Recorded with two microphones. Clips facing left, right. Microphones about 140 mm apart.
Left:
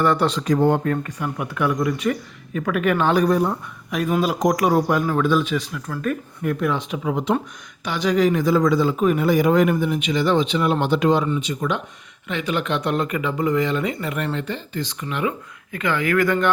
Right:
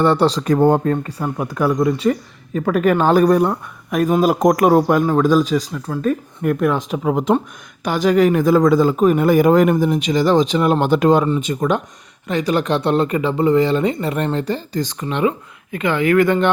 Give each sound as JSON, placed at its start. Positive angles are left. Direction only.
{"t": 0.0, "sound": "speech", "side_deg": -30}
{"t": 0.4, "sound": "speech", "side_deg": -55}
{"t": 0.7, "sound": "speech", "side_deg": -35}
{"t": 4.0, "sound": "speech", "side_deg": -45}
{"t": 6.4, "sound": "speech", "side_deg": -50}